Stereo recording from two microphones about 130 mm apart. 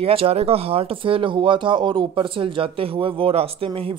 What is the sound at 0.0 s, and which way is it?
Speech, 45° right (ahead or behind).